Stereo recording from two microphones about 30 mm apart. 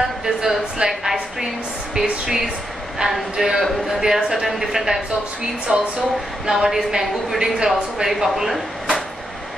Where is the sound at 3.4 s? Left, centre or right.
Right.